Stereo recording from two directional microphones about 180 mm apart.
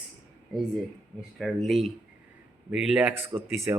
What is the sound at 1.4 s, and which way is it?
A man's voice, centre (ahead or behind).